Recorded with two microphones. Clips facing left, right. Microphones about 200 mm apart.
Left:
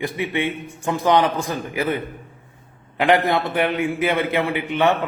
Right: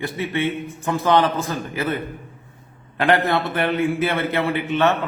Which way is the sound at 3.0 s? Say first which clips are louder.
Left 1 dB; 15° left (ahead or behind).